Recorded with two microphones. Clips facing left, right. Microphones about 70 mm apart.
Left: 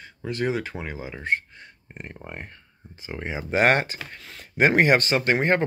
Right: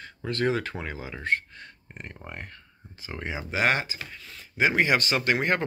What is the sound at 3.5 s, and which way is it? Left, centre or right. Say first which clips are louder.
Speech: left 5 dB; left.